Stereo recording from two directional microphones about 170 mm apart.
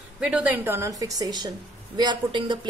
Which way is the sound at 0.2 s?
5° right (ahead or behind).